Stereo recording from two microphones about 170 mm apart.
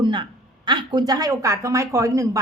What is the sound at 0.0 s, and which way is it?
A woman's voice, 25° right (ahead or behind).